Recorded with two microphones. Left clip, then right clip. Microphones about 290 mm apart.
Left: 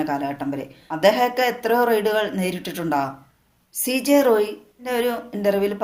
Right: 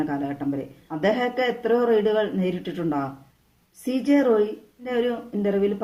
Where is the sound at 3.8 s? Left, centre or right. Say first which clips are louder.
Left 3 dB; left.